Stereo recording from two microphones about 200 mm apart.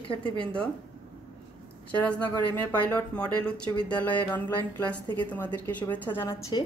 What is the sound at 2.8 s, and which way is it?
A woman's voice, 5° left (ahead or behind).